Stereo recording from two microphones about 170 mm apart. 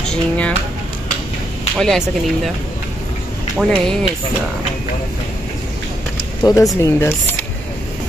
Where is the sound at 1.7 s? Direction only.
5° left (ahead or behind).